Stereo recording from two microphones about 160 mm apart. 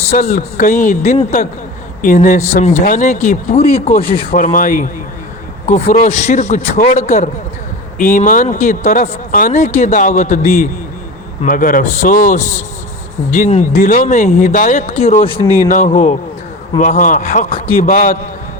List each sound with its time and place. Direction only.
0.1 s speech: 55° left (ahead or behind)
4.0 s speech: 65° left (ahead or behind); by 10.7 s 50° left (ahead or behind)
11.4 s speech: 60° left (ahead or behind)